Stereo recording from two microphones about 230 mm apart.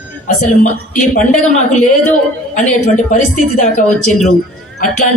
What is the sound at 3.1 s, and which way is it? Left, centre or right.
A man's voice, left.